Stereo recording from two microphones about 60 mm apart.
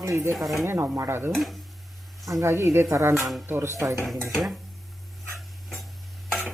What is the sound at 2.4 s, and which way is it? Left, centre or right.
Speech, right.